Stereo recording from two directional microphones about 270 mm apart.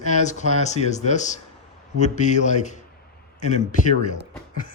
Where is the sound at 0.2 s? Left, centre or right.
Left.